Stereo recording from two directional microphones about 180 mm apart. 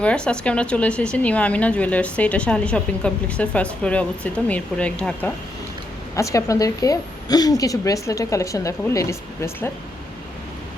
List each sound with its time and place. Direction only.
0.0 s speech: 5° left (ahead or behind)
6.1 s speech: 15° left (ahead or behind)